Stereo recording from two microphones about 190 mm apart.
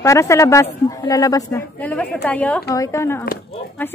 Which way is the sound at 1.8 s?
10° left (ahead or behind).